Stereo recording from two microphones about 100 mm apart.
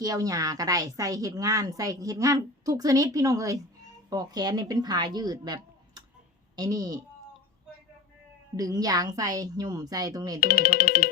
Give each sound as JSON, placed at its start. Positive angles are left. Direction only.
{"t": 0.0, "sound": "a woman's voice", "side_deg": -35}
{"t": 8.5, "sound": "a woman's voice", "side_deg": -40}